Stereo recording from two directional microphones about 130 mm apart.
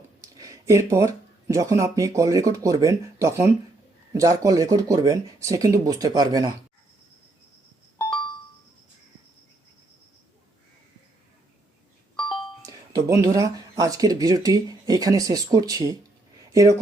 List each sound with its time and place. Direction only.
0.2 s speech: 25° right (ahead or behind)
12.6 s speech: 25° right (ahead or behind)